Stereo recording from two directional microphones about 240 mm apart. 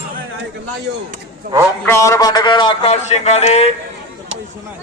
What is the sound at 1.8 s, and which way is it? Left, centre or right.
A man's voice, centre.